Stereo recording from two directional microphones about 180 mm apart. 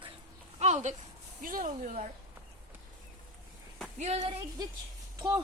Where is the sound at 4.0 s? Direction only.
40° right (ahead or behind).